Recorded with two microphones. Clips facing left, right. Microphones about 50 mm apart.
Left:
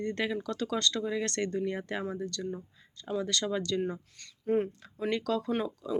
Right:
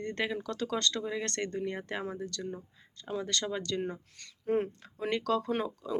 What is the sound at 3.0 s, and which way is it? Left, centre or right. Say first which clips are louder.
Speech: left 2 dB; right.